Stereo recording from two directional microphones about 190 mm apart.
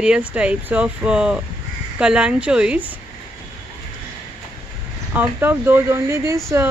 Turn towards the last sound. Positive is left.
turn(degrees=-15)  # may be behind; listen again after turning